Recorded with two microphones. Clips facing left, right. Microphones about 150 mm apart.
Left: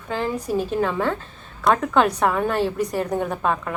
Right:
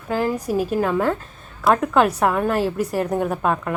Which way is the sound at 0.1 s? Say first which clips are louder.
Right 3 dB; 10° right (ahead or behind).